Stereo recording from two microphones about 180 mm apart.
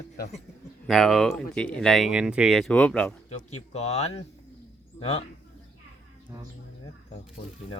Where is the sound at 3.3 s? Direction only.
35° left (ahead or behind).